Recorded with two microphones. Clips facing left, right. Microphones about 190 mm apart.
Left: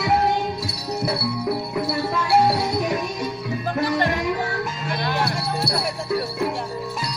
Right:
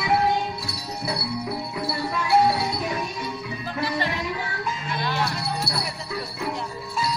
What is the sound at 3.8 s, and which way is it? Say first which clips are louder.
Music: left 4 dB; 50° left (ahead or behind).